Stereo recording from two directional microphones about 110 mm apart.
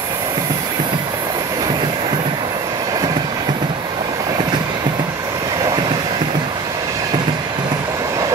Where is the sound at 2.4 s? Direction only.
35° right (ahead or behind).